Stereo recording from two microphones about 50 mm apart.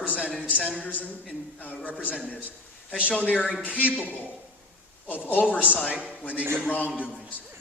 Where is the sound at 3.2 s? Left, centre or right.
Left.